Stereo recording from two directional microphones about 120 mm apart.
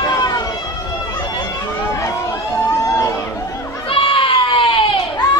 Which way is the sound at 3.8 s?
45° left (ahead or behind).